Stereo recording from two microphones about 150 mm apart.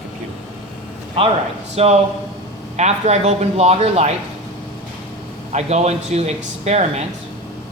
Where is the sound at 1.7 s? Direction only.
45° right (ahead or behind).